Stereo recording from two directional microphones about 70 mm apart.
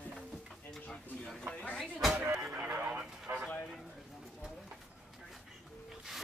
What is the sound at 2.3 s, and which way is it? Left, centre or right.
Music, centre.